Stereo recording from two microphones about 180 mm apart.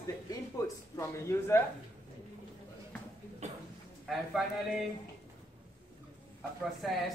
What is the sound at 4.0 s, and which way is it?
Speech, centre (ahead or behind).